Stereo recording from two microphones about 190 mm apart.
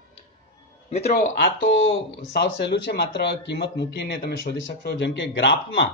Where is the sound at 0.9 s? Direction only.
30° left (ahead or behind).